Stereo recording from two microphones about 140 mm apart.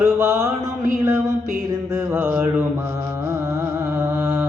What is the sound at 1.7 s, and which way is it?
Mantra, 20° right (ahead or behind).